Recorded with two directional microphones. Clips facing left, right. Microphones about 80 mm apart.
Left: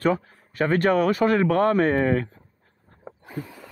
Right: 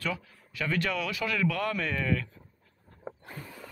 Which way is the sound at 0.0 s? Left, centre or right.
Left.